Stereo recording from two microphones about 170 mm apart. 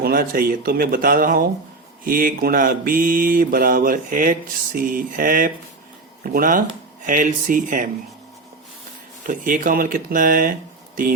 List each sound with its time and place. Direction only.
0.0 s mantra: 60° right (ahead or behind)
7.0 s speech: 50° right (ahead or behind)
9.2 s mantra: 50° right (ahead or behind)